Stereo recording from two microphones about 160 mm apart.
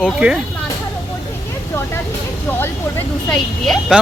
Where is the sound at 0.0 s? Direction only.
5° right (ahead or behind).